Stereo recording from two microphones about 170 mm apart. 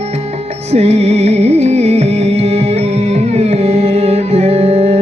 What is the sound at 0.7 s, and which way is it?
Music, 40° right (ahead or behind).